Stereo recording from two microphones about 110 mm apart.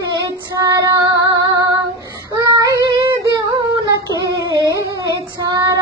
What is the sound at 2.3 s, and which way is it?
Child singing, 30° right (ahead or behind).